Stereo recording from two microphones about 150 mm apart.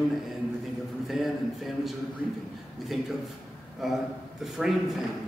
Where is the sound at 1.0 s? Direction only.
Centre (ahead or behind).